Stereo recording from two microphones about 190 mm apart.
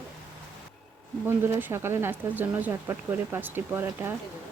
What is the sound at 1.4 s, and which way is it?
Speech, 10° right (ahead or behind).